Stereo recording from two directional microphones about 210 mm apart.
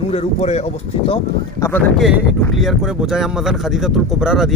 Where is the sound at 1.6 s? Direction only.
10° left (ahead or behind).